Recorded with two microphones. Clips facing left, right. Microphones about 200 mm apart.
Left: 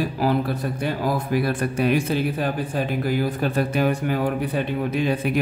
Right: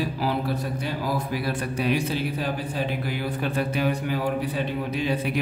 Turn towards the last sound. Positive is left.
turn(degrees=50)  # may be behind; listen again after turning